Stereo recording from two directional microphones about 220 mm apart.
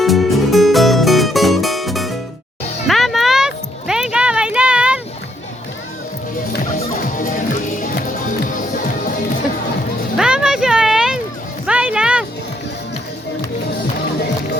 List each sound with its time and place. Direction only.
0.0 s music: centre (ahead or behind)
10.2 s music: 5° right (ahead or behind)